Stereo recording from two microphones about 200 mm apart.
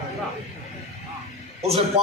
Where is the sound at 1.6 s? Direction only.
30° right (ahead or behind).